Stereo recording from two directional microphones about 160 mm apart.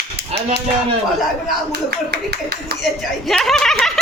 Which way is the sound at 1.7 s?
90° right.